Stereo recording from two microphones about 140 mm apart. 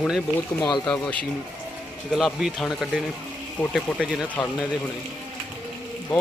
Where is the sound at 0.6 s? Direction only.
30° left (ahead or behind).